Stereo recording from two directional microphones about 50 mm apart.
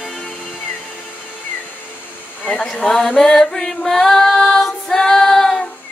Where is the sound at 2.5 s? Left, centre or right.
Left.